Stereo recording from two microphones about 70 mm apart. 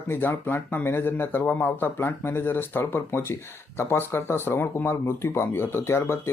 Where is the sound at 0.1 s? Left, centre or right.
Left.